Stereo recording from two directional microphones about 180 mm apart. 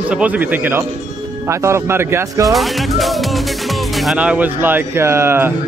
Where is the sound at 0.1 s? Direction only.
5° right (ahead or behind).